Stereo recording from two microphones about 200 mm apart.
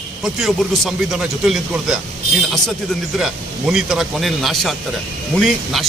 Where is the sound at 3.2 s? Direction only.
Centre (ahead or behind).